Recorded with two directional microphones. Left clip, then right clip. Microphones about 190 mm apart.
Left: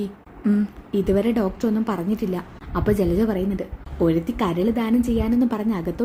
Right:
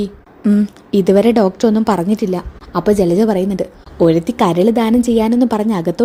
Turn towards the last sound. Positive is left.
turn(degrees=-35)  # may be behind; listen again after turning